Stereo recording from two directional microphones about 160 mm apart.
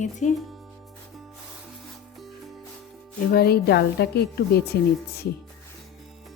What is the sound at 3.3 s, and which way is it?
A woman's voice, 75° left (ahead or behind).